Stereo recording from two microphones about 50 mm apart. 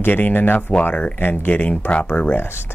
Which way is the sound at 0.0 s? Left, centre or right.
Left.